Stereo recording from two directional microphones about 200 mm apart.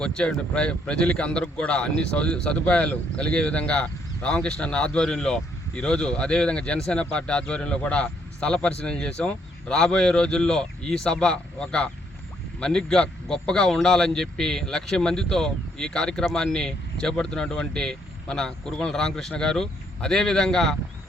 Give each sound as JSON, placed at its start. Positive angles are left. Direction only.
{"t": 0.0, "sound": "a man's voice", "side_deg": 5}